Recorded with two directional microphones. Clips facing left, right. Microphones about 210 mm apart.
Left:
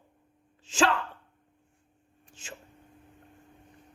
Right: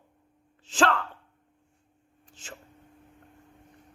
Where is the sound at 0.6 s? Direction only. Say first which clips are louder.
Right 1 dB; 10° left (ahead or behind).